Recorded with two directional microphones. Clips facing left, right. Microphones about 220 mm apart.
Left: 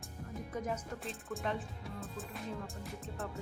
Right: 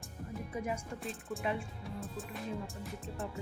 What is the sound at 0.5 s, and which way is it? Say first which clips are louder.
Speech: even; 10° right (ahead or behind).